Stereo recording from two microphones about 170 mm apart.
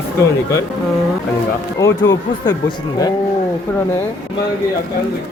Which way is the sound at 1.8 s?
20° left (ahead or behind).